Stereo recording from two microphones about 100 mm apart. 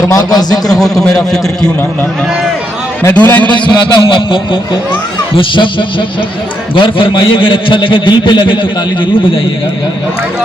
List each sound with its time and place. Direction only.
0.1 s a man's voice: 40° left (ahead or behind)
0.7 s a man's voice: 5° left (ahead or behind)
3.1 s a man's voice: 15° left (ahead or behind)
3.5 s a man's voice: 50° left (ahead or behind)